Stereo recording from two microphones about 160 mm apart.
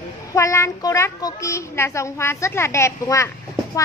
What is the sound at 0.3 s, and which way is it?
A woman's voice, 20° left (ahead or behind).